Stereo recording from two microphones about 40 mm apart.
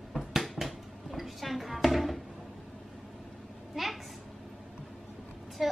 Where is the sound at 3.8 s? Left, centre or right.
Centre.